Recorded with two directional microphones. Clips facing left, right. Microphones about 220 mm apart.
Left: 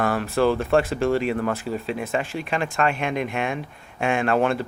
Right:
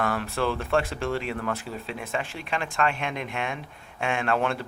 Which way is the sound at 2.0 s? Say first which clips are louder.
Left 2 dB; 45° left (ahead or behind).